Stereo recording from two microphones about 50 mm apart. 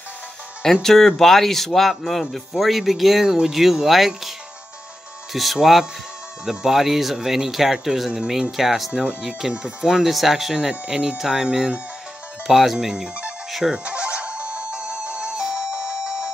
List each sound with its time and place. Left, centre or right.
0.8 s speech: centre
5.3 s speech: centre
12.4 s speech: centre
12.7 s speech: centre
13.7 s music: right